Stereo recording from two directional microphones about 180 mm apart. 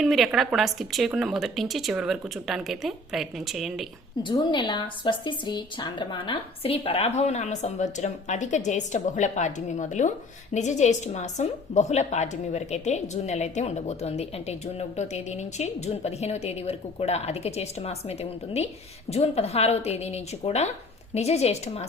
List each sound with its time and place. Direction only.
0.0 s a woman's voice: centre (ahead or behind)
4.2 s a woman's voice: 25° left (ahead or behind)